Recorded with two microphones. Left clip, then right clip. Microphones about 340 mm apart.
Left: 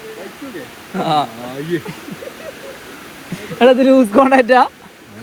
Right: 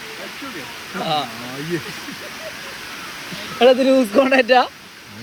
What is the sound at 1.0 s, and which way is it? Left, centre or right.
Speech, left.